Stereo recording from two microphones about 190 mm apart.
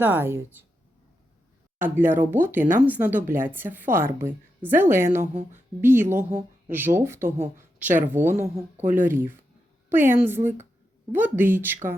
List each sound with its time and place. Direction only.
0.0 s speech: 10° right (ahead or behind)
1.8 s speech: 10° right (ahead or behind)
5.2 s speech: 35° right (ahead or behind)
5.8 s speech: 10° right (ahead or behind)